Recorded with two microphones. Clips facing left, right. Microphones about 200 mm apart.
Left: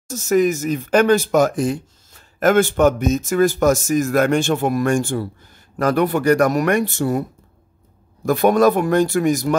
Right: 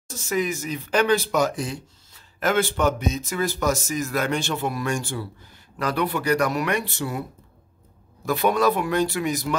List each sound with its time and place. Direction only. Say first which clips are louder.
0.1 s speech: left 9 dB; 45° left (ahead or behind)
8.3 s speech: left 6 dB; 45° left (ahead or behind)